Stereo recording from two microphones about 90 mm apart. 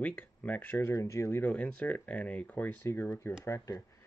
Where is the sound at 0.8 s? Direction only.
35° left (ahead or behind).